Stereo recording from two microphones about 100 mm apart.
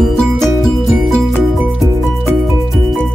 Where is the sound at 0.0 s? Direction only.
Centre (ahead or behind).